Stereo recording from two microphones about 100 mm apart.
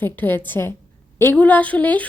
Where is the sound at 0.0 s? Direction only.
20° left (ahead or behind).